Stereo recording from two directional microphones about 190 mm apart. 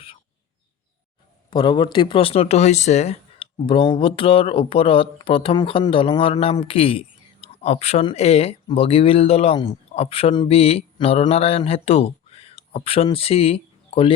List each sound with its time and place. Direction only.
1.5 s speech: 25° left (ahead or behind)